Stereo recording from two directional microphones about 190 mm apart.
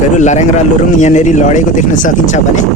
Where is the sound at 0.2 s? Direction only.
40° left (ahead or behind).